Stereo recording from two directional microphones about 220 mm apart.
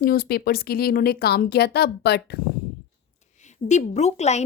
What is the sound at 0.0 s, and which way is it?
Speech, 40° left (ahead or behind).